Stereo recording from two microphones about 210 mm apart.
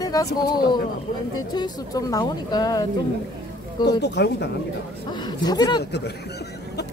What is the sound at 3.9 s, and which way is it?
Speech, 55° left (ahead or behind).